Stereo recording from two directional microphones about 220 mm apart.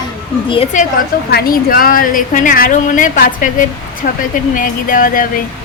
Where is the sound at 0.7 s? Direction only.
35° left (ahead or behind).